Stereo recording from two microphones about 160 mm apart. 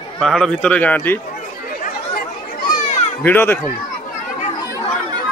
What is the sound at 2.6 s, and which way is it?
Children playing, 55° left (ahead or behind).